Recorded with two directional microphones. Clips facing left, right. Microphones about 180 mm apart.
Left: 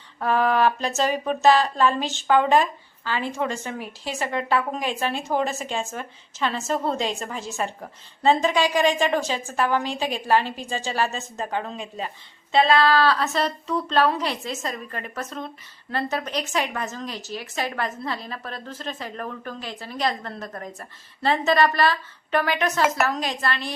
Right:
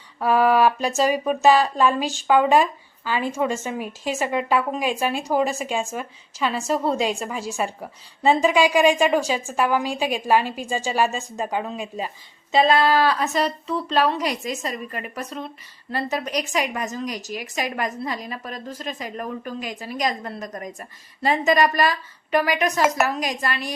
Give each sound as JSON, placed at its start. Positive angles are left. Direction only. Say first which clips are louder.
{"t": 0.2, "sound": "a woman's voice", "louder": "right 3 dB", "side_deg": -10}